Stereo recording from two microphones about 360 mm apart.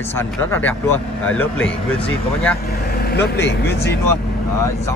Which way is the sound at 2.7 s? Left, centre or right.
Left.